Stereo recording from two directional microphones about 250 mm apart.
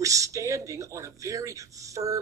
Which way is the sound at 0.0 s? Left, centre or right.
Centre.